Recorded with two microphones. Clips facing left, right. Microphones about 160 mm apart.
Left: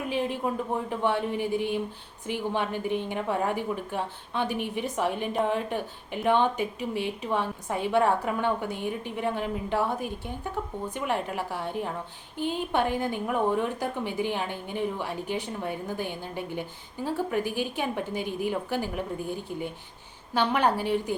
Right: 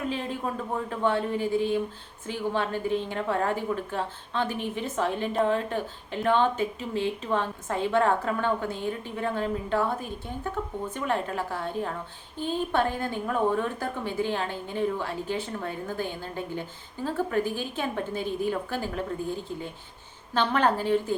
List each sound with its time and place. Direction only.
0.1 s a woman's voice: 15° left (ahead or behind)